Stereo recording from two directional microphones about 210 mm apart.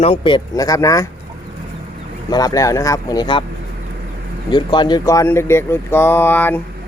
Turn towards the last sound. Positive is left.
turn(degrees=10)  # may be behind; listen again after turning